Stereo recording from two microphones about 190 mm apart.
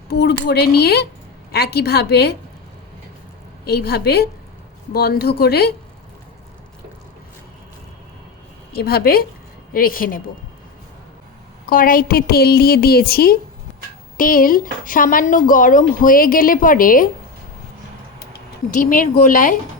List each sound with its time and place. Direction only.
0.1 s speech: 60° left (ahead or behind)
3.7 s speech: 60° left (ahead or behind)
8.7 s speech: 55° left (ahead or behind)
11.7 s speech: 45° left (ahead or behind)
18.7 s speech: 45° left (ahead or behind)